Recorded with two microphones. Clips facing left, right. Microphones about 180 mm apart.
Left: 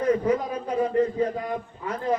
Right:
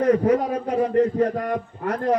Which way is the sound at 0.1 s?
65° right (ahead or behind).